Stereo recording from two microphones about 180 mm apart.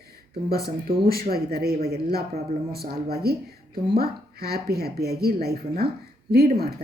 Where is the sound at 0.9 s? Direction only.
55° right (ahead or behind).